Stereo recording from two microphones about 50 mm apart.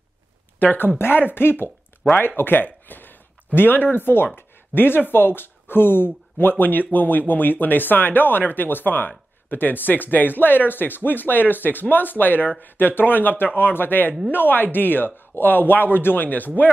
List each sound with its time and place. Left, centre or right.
0.6 s speech: left